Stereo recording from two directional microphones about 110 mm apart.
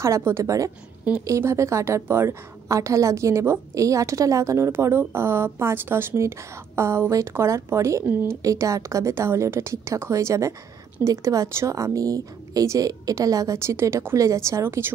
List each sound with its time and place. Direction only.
0.0 s a woman's voice: 25° right (ahead or behind)